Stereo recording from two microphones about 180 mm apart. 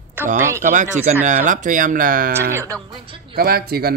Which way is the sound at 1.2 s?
45° right (ahead or behind).